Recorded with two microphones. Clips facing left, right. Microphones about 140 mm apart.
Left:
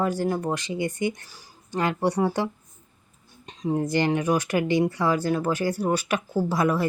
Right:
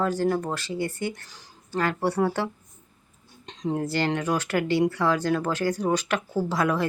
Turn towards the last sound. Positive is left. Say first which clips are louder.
# left 1 dB
turn(degrees=10)  # may be behind; listen again after turning